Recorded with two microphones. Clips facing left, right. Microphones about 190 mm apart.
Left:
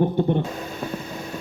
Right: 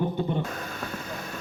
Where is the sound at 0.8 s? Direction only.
20° left (ahead or behind).